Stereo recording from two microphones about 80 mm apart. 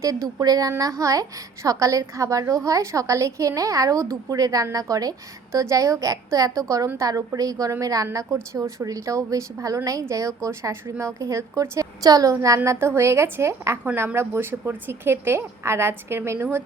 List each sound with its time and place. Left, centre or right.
0.0 s a woman's voice: right
12.0 s a woman's voice: right
12.6 s speech: right